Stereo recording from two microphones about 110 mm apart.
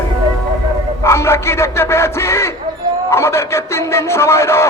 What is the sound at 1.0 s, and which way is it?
Speech, 25° left (ahead or behind).